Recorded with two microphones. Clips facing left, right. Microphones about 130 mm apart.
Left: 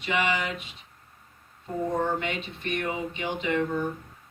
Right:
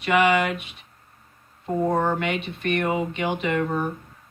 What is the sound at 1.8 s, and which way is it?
Speech, 65° right (ahead or behind).